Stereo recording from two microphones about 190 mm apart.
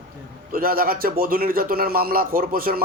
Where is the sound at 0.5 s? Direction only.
50° right (ahead or behind).